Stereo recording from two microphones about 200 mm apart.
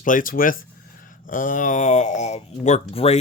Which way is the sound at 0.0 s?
40° left (ahead or behind).